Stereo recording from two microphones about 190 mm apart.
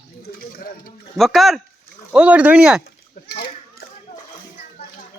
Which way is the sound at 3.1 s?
50° left (ahead or behind).